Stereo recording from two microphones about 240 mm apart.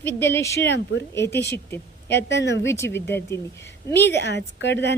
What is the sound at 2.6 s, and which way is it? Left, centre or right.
Speech, centre.